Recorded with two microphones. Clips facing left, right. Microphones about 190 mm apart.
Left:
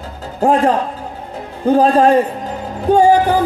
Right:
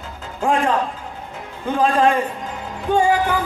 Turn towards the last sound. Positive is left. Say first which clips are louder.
# left 6 dB
turn(degrees=40)  # may be behind; listen again after turning